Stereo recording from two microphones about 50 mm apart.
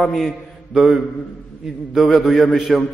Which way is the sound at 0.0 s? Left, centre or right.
Centre.